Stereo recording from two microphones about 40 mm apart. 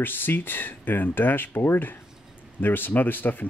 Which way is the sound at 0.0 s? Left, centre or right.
Left.